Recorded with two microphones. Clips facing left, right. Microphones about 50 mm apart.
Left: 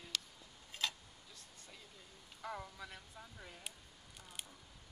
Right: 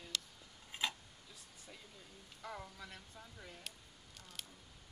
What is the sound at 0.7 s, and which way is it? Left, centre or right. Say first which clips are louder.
Tick-tock: right 1 dB; right.